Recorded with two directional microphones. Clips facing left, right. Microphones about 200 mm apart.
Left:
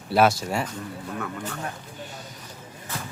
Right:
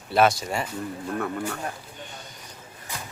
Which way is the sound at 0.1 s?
5° left (ahead or behind).